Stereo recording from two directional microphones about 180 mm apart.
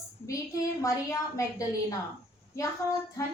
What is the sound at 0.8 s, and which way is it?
A woman's voice, 15° left (ahead or behind).